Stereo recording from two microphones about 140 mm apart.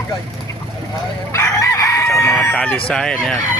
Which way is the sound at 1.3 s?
20° left (ahead or behind).